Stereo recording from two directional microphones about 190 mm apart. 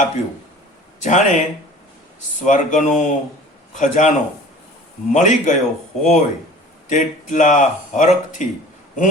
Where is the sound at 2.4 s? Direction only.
40° left (ahead or behind).